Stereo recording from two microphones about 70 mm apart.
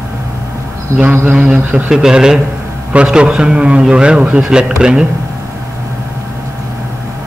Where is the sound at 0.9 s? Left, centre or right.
Right.